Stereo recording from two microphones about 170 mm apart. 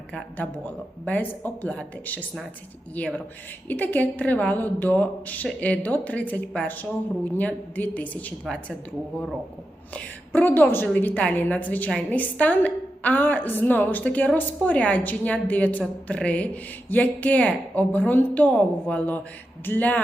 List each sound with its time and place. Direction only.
0.1 s a woman's voice: 10° left (ahead or behind)
9.9 s a woman's voice: 10° left (ahead or behind)